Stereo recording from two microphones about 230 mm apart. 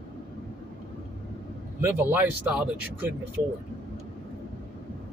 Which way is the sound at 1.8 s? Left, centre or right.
Centre.